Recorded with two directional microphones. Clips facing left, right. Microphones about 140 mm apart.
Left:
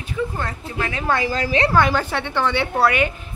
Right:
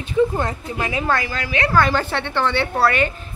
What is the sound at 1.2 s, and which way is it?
Speech, 35° left (ahead or behind).